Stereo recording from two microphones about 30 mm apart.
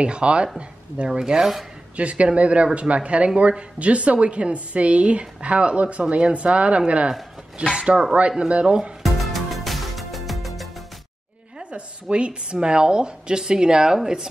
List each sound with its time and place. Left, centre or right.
0.0 s speech: right
1.0 s a woman's voice: right
2.0 s a woman's voice: right
9.0 s music: centre
11.7 s a woman's voice: right